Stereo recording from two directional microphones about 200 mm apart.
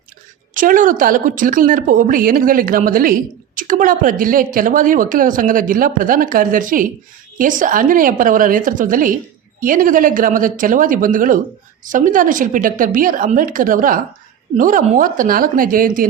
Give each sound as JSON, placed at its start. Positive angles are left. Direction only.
{"t": 0.5, "sound": "a woman's voice", "side_deg": -40}